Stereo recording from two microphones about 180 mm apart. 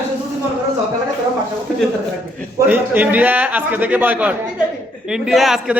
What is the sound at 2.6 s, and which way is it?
A man's voice, 10° right (ahead or behind).